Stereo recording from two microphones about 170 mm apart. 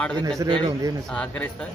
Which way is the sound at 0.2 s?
20° right (ahead or behind).